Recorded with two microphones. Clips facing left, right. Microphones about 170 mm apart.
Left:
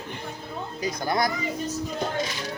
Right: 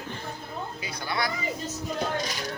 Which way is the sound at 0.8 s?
45° left (ahead or behind).